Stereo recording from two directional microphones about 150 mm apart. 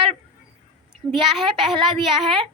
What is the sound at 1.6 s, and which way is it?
Speech, 35° right (ahead or behind).